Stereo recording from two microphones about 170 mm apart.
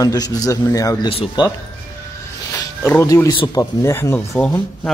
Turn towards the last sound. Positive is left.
turn(degrees=10)  # may be behind; listen again after turning